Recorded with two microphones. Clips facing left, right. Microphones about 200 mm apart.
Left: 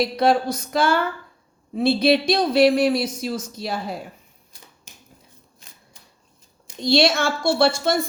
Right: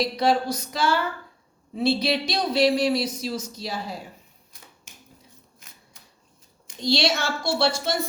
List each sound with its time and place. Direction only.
0.2 s speech: 50° left (ahead or behind)
6.8 s speech: 55° left (ahead or behind)